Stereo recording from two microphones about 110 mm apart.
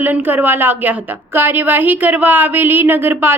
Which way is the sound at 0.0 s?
15° right (ahead or behind).